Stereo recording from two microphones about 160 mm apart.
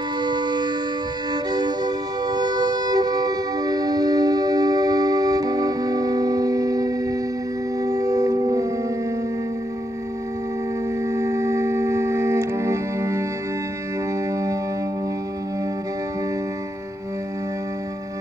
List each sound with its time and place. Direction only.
0.2 s music: 25° right (ahead or behind)
11.1 s music: 20° right (ahead or behind)